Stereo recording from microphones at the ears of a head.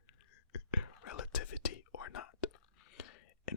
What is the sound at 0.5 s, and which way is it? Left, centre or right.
Whispering, left.